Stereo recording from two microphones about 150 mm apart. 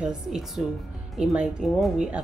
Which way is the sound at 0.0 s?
5° right (ahead or behind).